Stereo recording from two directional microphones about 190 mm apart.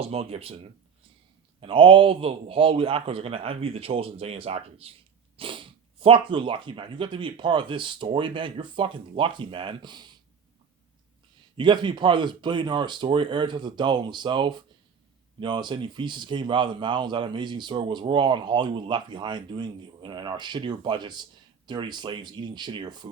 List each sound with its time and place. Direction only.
0.0 s a man's voice: 30° right (ahead or behind)
11.5 s a man's voice: 25° right (ahead or behind)